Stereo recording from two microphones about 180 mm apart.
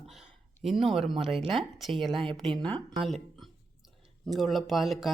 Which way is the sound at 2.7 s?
30° right (ahead or behind).